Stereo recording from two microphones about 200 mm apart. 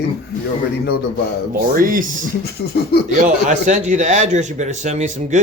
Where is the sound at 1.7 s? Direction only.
45° right (ahead or behind).